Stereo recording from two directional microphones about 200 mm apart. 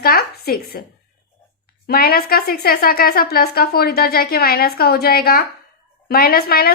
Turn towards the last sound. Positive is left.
turn(degrees=50)  # may be behind; listen again after turning